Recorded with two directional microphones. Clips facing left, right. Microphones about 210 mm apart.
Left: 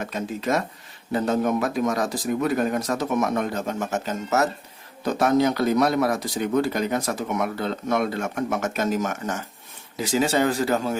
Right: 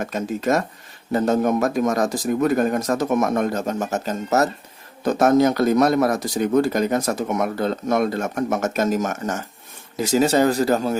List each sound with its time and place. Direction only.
0.0 s speech: 45° right (ahead or behind)